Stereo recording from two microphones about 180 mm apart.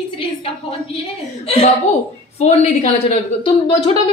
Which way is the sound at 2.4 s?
40° left (ahead or behind).